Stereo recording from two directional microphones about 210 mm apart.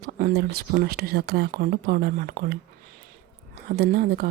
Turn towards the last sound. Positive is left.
turn(degrees=-50)  # may be behind; listen again after turning